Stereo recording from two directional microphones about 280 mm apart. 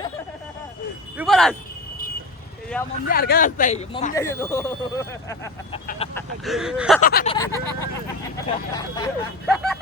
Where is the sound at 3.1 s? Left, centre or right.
Left.